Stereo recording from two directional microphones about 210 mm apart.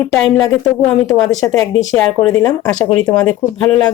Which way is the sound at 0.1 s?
Centre (ahead or behind).